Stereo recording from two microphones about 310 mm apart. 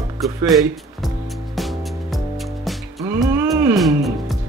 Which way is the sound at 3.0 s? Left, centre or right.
Centre.